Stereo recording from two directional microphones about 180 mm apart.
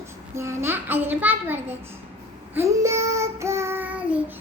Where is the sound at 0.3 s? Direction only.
15° right (ahead or behind).